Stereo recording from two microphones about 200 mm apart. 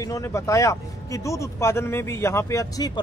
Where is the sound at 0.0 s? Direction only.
15° left (ahead or behind).